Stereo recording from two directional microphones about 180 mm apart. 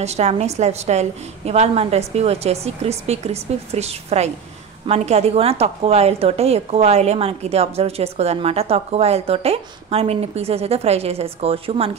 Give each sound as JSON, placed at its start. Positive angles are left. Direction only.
{"t": 0.0, "sound": "a woman's voice", "side_deg": -35}